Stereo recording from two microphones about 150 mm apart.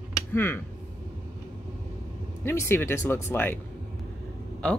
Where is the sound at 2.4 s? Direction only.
15° left (ahead or behind).